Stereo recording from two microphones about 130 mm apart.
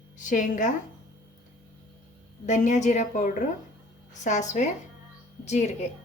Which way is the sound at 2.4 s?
65° left (ahead or behind).